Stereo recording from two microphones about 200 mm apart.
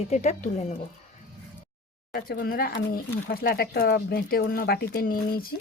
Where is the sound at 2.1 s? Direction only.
50° left (ahead or behind).